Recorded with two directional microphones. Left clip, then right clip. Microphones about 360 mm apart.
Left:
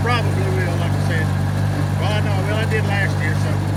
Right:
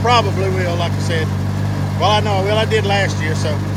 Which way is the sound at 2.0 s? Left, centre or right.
Centre.